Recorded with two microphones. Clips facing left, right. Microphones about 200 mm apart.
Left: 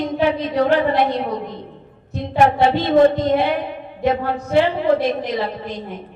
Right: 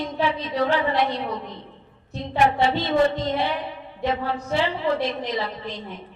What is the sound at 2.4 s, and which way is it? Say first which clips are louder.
A woman's voice: left 5 dB; 50° left (ahead or behind).